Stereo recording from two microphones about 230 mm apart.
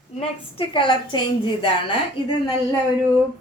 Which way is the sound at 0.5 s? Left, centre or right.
Left.